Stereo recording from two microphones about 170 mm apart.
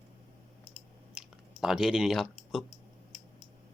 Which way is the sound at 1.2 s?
5° right (ahead or behind).